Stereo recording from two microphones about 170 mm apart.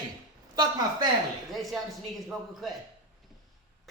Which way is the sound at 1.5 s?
Centre (ahead or behind).